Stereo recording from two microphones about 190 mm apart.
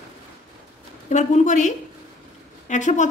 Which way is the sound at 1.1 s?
40° left (ahead or behind).